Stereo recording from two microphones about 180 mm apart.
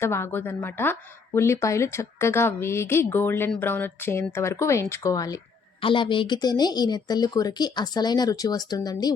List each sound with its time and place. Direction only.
0.0 s speech: 15° left (ahead or behind)